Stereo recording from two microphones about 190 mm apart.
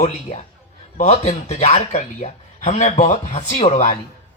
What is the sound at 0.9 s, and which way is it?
Speech, 35° left (ahead or behind).